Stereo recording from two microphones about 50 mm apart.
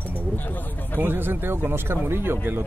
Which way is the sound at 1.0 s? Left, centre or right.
Right.